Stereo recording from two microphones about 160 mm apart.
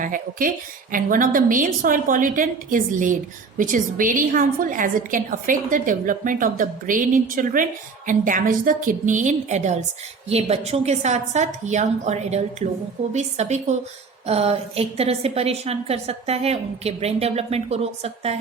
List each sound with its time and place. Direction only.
0.0 s a woman's voice: 60° right (ahead or behind); by 18.3 s 40° right (ahead or behind)